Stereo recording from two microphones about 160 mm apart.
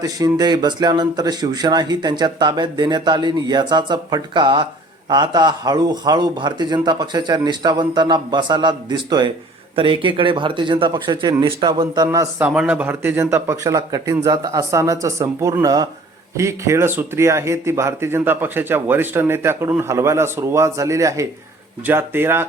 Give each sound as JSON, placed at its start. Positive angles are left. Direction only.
{"t": 0.0, "sound": "a man's voice", "side_deg": -25}
{"t": 12.4, "sound": "speech", "side_deg": -10}